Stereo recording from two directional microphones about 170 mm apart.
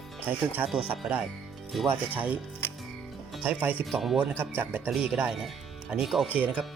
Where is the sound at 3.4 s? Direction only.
10° right (ahead or behind).